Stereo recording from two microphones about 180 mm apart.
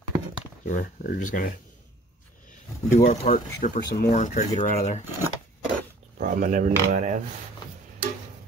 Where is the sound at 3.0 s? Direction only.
45° left (ahead or behind).